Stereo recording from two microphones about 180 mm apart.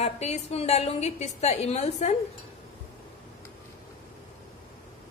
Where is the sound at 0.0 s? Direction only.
35° left (ahead or behind).